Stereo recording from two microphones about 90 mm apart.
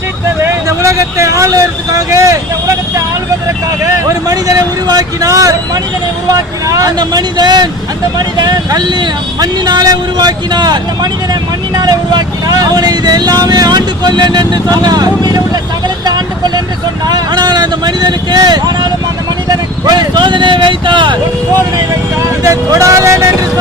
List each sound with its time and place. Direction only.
0.4 s speech: 30° right (ahead or behind)
4.3 s speech: 45° right (ahead or behind)
17.1 s speech: 50° right (ahead or behind)
22.4 s speech: 40° right (ahead or behind)